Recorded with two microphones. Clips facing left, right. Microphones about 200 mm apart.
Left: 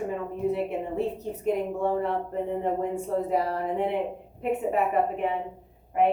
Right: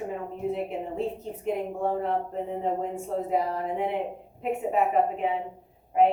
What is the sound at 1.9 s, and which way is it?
Speech, 60° left (ahead or behind).